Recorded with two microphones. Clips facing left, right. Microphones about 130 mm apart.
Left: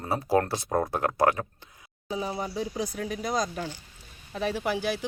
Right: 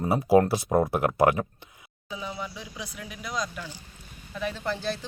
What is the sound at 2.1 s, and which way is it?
Speech, 35° left (ahead or behind).